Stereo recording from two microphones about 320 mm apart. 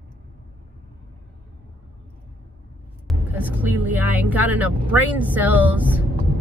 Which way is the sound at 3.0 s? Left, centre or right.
Centre.